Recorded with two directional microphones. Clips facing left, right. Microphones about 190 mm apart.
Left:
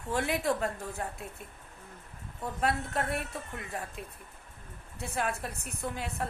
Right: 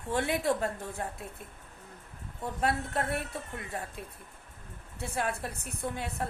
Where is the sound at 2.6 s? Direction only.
25° right (ahead or behind).